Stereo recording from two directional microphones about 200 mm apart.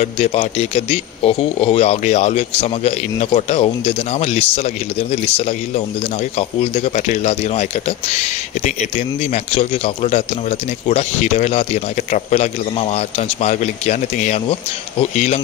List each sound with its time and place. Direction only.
0.0 s speech: 30° left (ahead or behind)